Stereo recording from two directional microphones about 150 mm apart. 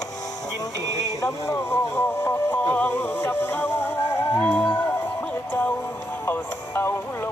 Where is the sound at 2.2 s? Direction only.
10° left (ahead or behind).